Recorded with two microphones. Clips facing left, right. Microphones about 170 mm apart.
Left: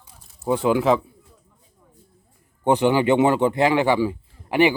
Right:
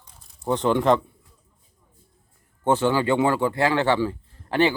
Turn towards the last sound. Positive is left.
turn(degrees=15)  # may be behind; listen again after turning